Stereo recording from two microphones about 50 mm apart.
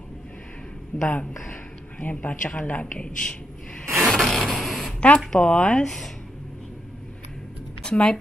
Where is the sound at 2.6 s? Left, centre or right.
Left.